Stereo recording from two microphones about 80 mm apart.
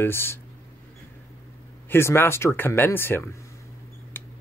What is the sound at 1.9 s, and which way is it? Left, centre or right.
Speech, left.